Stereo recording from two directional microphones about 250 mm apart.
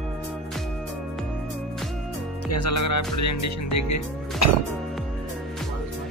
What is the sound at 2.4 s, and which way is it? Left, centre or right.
Music, left.